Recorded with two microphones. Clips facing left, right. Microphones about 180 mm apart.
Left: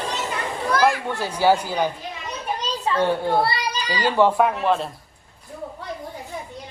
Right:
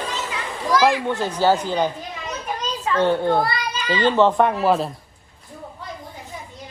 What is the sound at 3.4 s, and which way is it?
Children playing, 30° left (ahead or behind).